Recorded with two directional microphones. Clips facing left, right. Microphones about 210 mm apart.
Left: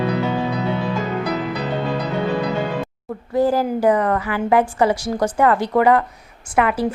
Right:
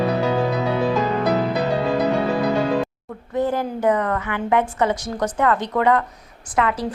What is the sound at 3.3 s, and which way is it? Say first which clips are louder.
A woman's voice: left 4 dB; 30° left (ahead or behind).